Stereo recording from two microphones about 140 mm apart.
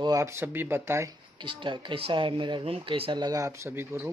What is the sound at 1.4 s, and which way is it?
Speech, 35° right (ahead or behind).